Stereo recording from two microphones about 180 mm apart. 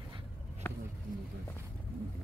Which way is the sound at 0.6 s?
10° left (ahead or behind).